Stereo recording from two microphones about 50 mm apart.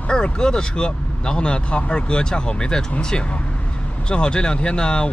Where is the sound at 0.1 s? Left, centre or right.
Centre.